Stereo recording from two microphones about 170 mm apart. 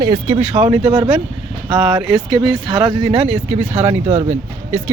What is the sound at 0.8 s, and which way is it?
Speech, 30° right (ahead or behind).